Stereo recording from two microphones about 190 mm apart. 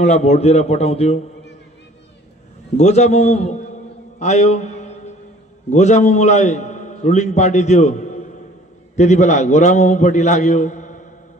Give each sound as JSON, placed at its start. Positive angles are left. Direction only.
{"t": 0.0, "sound": "a man's voice", "side_deg": 35}
{"t": 2.8, "sound": "a man's voice", "side_deg": 35}
{"t": 4.2, "sound": "a sound", "side_deg": 35}
{"t": 5.7, "sound": "a man's voice", "side_deg": 40}